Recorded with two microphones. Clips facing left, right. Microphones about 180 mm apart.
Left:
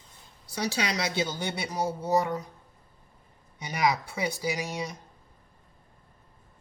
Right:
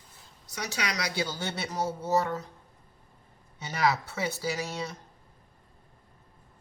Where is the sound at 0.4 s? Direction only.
30° left (ahead or behind); by 2.5 s 15° left (ahead or behind).